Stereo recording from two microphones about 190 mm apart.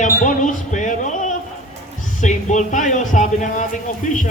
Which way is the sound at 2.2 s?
40° left (ahead or behind).